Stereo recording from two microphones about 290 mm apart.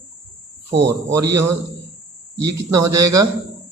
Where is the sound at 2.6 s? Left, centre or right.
Right.